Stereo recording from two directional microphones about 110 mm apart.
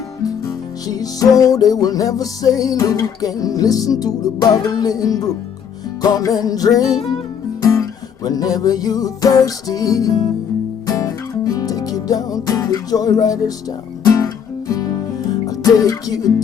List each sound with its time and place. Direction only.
0.3 s music: 35° left (ahead or behind)